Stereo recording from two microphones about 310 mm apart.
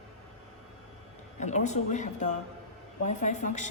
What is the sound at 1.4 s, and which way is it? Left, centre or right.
A woman's voice, left.